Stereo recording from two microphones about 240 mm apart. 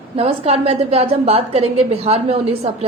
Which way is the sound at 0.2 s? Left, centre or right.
Right.